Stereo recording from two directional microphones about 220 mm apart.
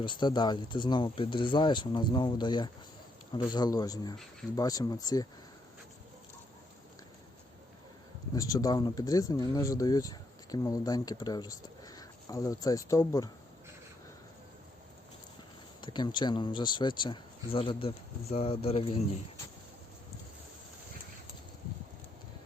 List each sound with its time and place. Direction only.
0.0 s speech: 20° left (ahead or behind)
8.4 s speech: 15° left (ahead or behind)
15.8 s speech: 20° left (ahead or behind)